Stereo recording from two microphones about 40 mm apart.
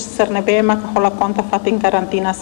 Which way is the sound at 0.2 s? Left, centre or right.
Centre.